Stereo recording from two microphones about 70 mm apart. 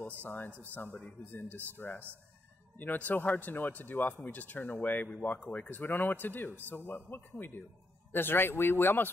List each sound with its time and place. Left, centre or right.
0.2 s speech: left
5.1 s speech: centre; by 9.1 s left